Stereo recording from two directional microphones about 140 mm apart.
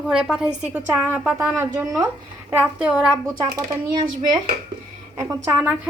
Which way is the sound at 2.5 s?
10° right (ahead or behind).